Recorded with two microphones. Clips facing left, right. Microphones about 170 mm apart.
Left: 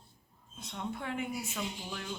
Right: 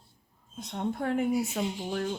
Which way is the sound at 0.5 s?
45° right (ahead or behind).